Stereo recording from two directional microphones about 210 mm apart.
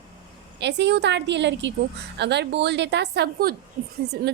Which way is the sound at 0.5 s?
55° right (ahead or behind).